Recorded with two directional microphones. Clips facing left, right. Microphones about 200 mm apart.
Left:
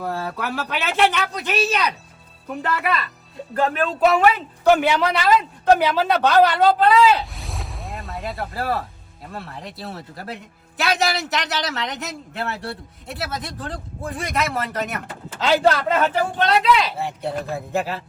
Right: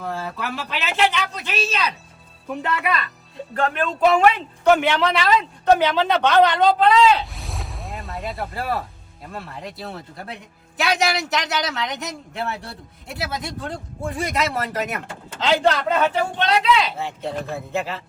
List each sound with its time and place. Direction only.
0.0 s speech: centre (ahead or behind)
1.6 s speech: 15° left (ahead or behind)
2.5 s speech: centre (ahead or behind)